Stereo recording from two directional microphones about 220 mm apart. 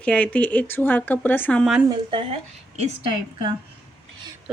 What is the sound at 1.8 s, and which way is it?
Speech, 20° right (ahead or behind).